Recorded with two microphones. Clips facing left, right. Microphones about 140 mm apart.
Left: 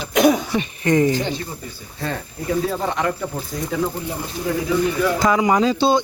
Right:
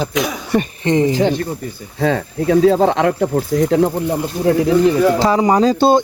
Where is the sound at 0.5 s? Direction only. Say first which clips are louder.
Right 6 dB; 55° right (ahead or behind).